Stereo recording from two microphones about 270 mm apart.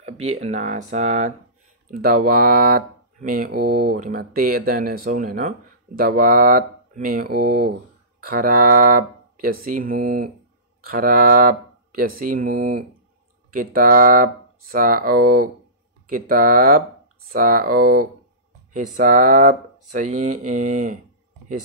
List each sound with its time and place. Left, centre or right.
0.0 s speech: right